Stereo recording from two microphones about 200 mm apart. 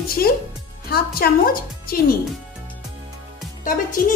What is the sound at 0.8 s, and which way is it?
A woman's voice, 50° left (ahead or behind).